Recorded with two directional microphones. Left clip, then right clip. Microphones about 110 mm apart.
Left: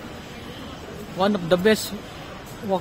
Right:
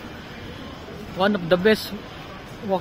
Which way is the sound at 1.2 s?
Centre (ahead or behind).